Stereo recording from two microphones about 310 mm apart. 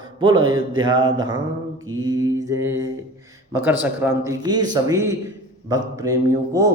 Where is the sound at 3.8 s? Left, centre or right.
Centre.